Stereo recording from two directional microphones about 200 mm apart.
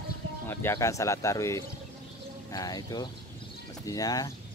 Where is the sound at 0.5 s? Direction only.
10° left (ahead or behind).